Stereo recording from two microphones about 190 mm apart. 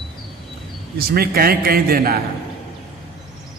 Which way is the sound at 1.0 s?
55° right (ahead or behind).